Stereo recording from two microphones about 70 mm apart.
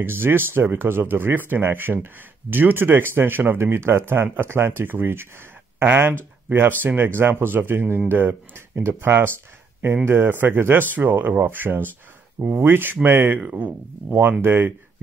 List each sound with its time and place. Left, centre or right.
0.0 s speech: right
14.4 s speech: right